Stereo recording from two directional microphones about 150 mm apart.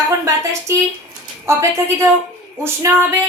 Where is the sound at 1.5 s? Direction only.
15° right (ahead or behind).